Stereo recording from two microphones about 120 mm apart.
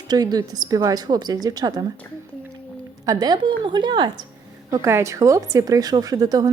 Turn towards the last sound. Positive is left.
turn(degrees=-30)  # may be behind; listen again after turning